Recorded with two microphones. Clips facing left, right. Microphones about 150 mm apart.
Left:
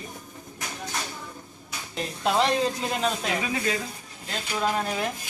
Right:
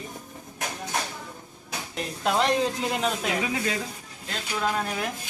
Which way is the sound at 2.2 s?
Centre (ahead or behind).